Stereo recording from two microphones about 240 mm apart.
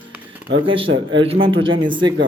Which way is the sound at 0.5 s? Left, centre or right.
Right.